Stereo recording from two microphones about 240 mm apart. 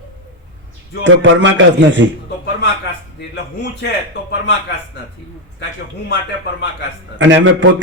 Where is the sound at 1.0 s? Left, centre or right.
Right.